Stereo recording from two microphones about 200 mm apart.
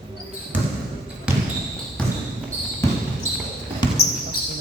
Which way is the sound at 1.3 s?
5° right (ahead or behind).